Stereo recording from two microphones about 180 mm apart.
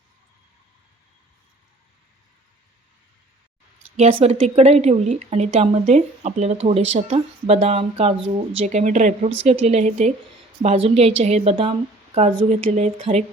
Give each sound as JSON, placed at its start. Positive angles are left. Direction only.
{"t": 3.9, "sound": "speech", "side_deg": -35}